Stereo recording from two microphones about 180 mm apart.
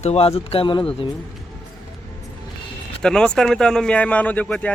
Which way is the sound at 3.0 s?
5° left (ahead or behind).